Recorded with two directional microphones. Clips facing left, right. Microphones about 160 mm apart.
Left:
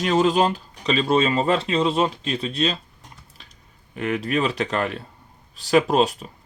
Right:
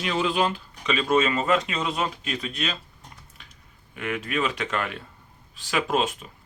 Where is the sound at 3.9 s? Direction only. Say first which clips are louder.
Left 5 dB; 35° left (ahead or behind).